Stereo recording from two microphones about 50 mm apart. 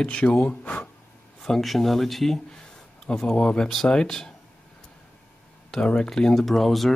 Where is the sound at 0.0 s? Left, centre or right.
Left.